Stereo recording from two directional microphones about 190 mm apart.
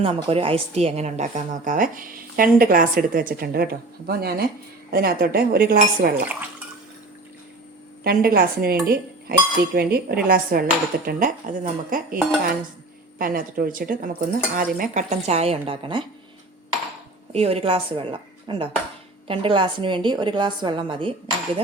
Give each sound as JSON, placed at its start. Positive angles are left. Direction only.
{"t": 0.0, "sound": "a woman's voice", "side_deg": -30}
{"t": 8.0, "sound": "a woman's voice", "side_deg": -50}
{"t": 17.3, "sound": "a woman's voice", "side_deg": -30}